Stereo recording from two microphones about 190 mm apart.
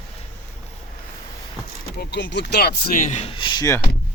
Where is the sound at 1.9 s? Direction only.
60° left (ahead or behind); by 3.8 s 20° left (ahead or behind).